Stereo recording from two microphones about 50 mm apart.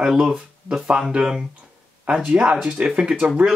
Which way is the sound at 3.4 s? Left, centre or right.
Right.